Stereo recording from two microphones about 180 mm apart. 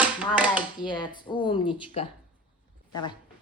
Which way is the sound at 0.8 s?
25° left (ahead or behind).